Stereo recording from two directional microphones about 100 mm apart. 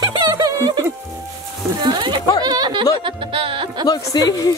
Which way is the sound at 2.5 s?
45° right (ahead or behind).